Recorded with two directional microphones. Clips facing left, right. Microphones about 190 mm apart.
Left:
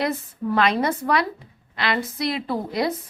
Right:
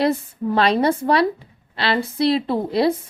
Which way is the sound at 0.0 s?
30° right (ahead or behind).